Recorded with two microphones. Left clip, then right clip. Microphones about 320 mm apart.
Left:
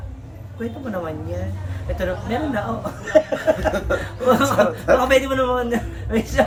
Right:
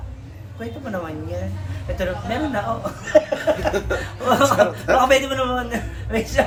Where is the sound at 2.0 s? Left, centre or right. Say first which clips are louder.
Even; centre.